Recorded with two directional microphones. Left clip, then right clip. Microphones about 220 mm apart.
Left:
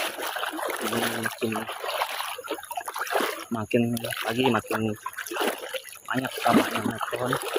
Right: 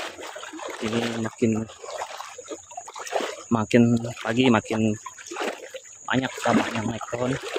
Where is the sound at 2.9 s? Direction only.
45° left (ahead or behind).